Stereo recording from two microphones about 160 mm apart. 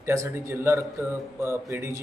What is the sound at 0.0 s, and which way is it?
A man's voice, 20° right (ahead or behind).